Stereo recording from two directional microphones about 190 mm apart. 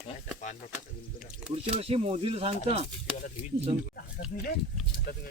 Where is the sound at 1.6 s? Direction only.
30° right (ahead or behind).